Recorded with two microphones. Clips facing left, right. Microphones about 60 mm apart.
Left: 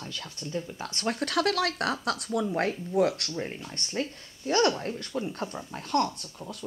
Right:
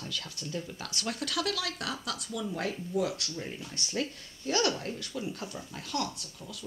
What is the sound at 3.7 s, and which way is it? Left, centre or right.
Speech, left.